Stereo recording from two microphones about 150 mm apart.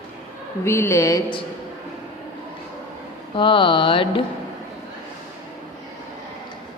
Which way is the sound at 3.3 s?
35° left (ahead or behind).